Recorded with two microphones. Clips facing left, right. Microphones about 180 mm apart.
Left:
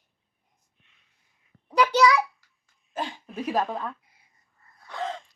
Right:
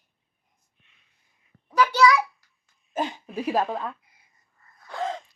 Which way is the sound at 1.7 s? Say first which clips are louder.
Even; 20° left (ahead or behind).